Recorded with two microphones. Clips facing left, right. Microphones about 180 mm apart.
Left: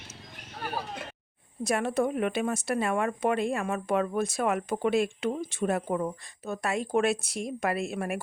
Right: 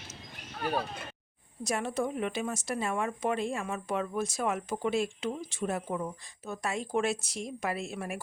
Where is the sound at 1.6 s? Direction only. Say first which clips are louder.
Left 5 dB; 60° left (ahead or behind).